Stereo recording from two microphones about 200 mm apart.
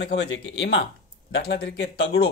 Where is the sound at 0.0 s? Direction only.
60° left (ahead or behind).